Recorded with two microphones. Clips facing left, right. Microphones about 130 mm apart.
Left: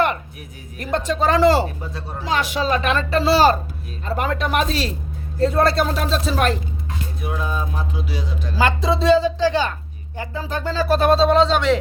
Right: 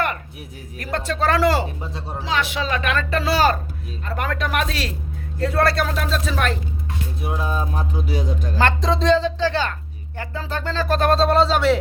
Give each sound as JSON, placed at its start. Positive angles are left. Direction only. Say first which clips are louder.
{"t": 0.8, "sound": "speech", "louder": "left 3 dB", "side_deg": 20}
{"t": 1.9, "sound": "speech", "louder": "even", "side_deg": -25}
{"t": 2.2, "sound": "speech", "louder": "left 3 dB", "side_deg": 45}
{"t": 7.2, "sound": "music", "louder": "right 1 dB", "side_deg": -30}
{"t": 8.5, "sound": "speech", "louder": "left 1 dB", "side_deg": 10}